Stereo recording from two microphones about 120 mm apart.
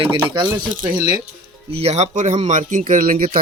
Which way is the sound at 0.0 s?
45° right (ahead or behind).